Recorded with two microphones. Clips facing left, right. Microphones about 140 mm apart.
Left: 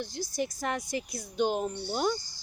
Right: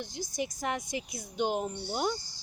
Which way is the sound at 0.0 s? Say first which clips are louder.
Left 2 dB; 20° right (ahead or behind).